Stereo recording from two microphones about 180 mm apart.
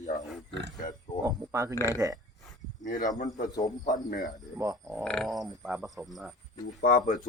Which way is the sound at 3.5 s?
20° left (ahead or behind).